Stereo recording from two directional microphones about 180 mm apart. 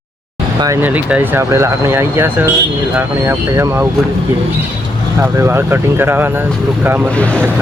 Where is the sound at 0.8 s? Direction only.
10° right (ahead or behind).